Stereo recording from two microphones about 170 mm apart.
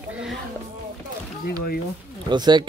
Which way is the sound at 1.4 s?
65° left (ahead or behind).